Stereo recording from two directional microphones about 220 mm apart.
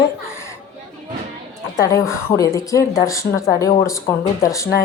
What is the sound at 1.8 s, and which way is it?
A woman's voice, 15° left (ahead or behind).